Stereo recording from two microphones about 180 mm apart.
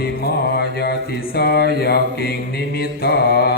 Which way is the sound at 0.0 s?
60° left (ahead or behind).